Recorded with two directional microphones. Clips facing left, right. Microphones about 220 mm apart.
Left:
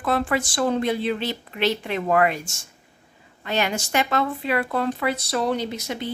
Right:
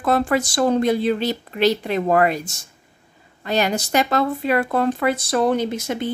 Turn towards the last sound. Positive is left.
turn(degrees=-50)  # may be behind; listen again after turning